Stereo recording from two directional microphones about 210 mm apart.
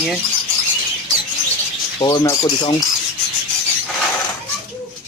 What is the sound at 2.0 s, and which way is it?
Speech, 20° left (ahead or behind).